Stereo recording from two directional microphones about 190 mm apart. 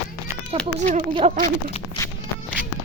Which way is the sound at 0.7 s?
35° right (ahead or behind).